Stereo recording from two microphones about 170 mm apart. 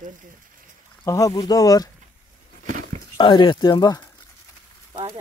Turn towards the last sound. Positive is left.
turn(degrees=-30)  # may be behind; listen again after turning